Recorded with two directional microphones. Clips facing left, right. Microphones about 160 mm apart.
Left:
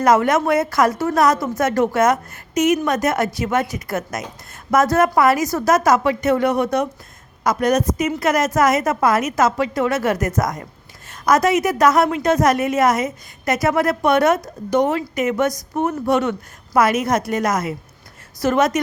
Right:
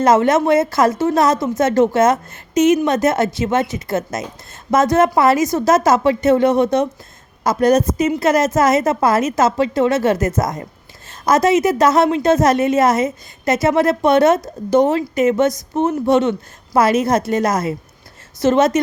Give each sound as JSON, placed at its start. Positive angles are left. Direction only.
{"t": 0.0, "sound": "a woman's voice", "side_deg": -25}